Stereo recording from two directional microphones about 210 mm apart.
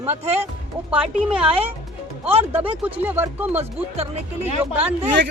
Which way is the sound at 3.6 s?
30° right (ahead or behind).